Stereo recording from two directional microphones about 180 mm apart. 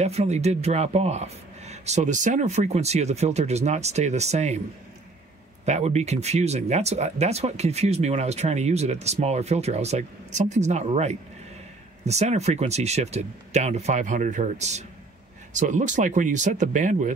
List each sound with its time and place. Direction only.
0.0 s speech: 35° right (ahead or behind)
5.7 s speech: 40° right (ahead or behind)